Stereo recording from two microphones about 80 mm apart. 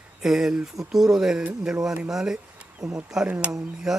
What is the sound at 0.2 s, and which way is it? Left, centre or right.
Speech, centre.